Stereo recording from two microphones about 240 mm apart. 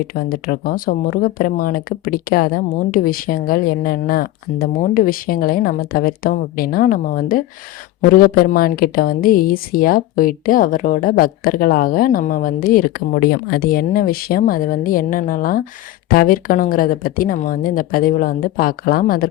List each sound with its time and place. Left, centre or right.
0.1 s a woman's voice: left